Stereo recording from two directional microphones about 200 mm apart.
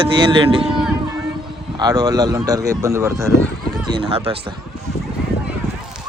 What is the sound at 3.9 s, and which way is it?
Speech, 25° right (ahead or behind).